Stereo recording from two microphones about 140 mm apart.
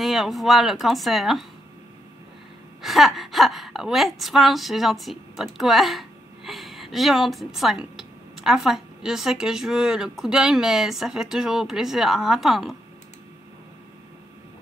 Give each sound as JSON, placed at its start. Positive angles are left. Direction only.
{"t": 0.0, "sound": "a woman's voice", "side_deg": 0}
{"t": 2.8, "sound": "a woman's voice", "side_deg": 0}